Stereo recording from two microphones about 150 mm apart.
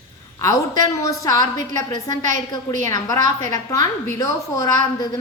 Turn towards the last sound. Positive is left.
turn(degrees=25)  # may be behind; listen again after turning